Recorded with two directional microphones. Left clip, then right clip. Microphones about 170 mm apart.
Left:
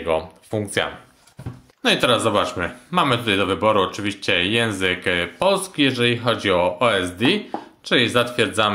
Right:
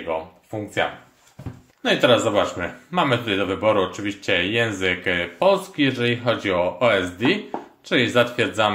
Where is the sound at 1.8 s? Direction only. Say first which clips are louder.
Even; 35° left (ahead or behind).